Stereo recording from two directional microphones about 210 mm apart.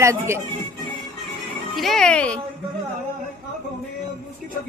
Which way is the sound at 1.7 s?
Centre (ahead or behind).